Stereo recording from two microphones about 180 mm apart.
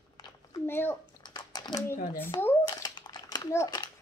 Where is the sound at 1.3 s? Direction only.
25° left (ahead or behind).